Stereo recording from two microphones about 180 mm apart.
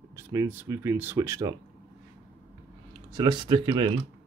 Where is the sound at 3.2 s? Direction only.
25° right (ahead or behind).